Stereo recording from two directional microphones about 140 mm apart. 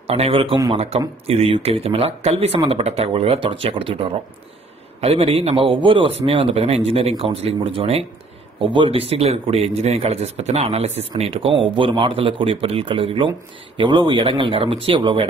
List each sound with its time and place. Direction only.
0.0 s speech: 45° right (ahead or behind)